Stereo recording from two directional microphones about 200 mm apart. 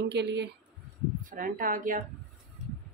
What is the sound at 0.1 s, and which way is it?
Speech, 60° right (ahead or behind).